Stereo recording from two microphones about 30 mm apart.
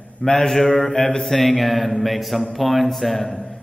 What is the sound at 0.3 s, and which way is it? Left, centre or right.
A man's voice, centre.